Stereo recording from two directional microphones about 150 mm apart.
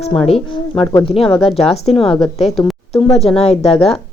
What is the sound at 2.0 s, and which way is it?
Speech, centre (ahead or behind).